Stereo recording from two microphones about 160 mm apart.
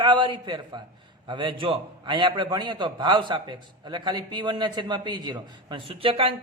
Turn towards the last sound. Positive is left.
turn(degrees=-35)  # may be behind; listen again after turning